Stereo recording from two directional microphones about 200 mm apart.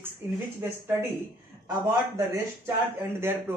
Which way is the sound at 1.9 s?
15° right (ahead or behind).